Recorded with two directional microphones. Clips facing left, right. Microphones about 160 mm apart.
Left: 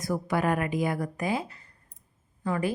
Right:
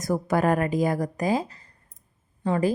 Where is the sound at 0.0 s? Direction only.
45° right (ahead or behind).